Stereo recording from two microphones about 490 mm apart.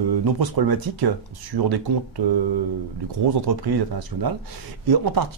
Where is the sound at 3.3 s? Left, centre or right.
Right.